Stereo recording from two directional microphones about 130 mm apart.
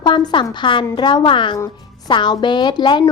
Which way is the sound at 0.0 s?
35° left (ahead or behind).